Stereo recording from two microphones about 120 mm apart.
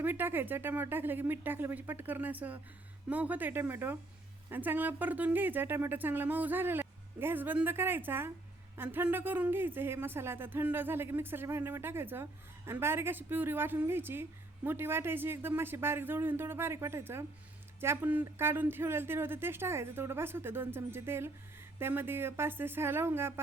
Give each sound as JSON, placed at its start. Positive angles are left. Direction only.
{"t": 0.0, "sound": "speech", "side_deg": -15}